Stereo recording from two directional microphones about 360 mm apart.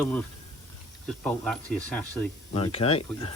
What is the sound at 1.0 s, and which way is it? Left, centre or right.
Speech, centre.